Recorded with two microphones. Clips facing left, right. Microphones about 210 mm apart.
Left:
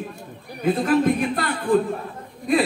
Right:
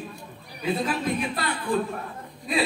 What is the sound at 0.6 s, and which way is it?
A man's voice, 50° left (ahead or behind).